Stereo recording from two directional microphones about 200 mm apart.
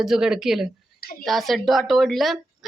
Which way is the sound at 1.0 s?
45° left (ahead or behind).